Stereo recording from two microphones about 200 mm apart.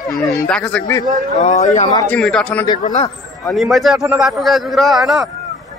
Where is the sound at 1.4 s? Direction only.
35° left (ahead or behind).